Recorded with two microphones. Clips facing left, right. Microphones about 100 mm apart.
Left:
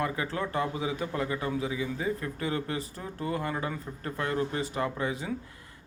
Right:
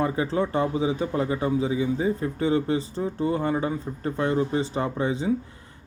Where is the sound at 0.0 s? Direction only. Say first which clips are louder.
Right 7 dB; 25° right (ahead or behind).